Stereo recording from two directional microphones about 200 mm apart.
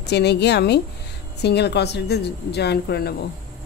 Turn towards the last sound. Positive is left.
turn(degrees=50)  # may be behind; listen again after turning